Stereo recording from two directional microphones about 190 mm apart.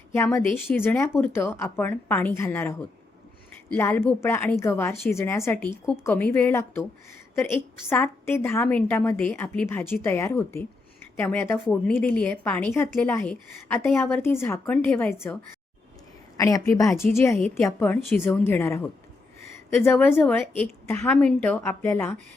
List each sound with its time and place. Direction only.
0.1 s a woman's voice: 15° left (ahead or behind)
16.4 s a woman's voice: 15° left (ahead or behind)
20.1 s a woman's voice: 10° left (ahead or behind)